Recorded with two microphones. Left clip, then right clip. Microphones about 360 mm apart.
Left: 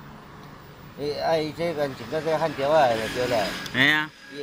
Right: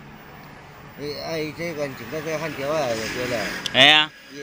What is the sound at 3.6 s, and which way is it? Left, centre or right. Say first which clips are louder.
Speech: right 9 dB; centre.